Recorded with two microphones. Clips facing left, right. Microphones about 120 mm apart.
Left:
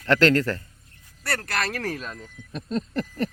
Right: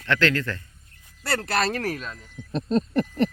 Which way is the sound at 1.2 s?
30° right (ahead or behind).